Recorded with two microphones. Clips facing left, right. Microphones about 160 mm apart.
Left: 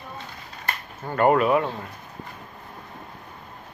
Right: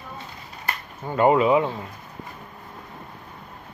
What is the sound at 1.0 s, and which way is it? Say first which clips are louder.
Speech: right 1 dB; 15° right (ahead or behind).